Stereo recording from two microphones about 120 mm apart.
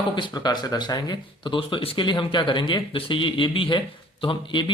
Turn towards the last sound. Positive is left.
turn(degrees=45)  # may be behind; listen again after turning